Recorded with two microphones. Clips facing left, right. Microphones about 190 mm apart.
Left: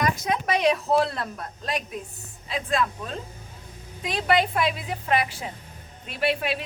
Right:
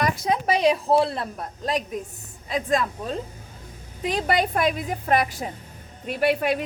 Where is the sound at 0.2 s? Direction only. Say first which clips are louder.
Right 3 dB; 30° right (ahead or behind).